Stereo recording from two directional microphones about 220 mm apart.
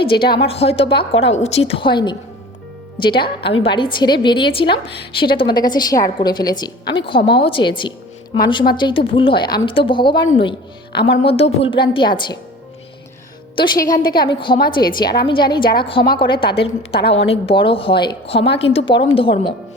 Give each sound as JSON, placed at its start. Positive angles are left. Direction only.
{"t": 0.1, "sound": "a woman's voice", "side_deg": 45}
{"t": 0.3, "sound": "a woman's voice", "side_deg": 25}
{"t": 13.6, "sound": "a woman's voice", "side_deg": 15}
{"t": 13.9, "sound": "a woman's voice", "side_deg": 40}
{"t": 14.3, "sound": "a woman's voice", "side_deg": 20}